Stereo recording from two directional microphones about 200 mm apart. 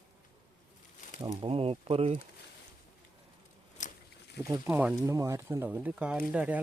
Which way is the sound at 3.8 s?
40° left (ahead or behind).